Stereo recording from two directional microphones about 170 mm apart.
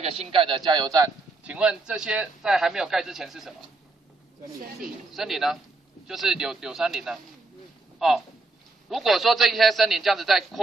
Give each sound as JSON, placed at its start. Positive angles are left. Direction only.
{"t": 0.0, "sound": "a man's voice", "side_deg": -35}
{"t": 1.4, "sound": "a man's voice", "side_deg": -5}
{"t": 4.7, "sound": "a man's voice", "side_deg": 0}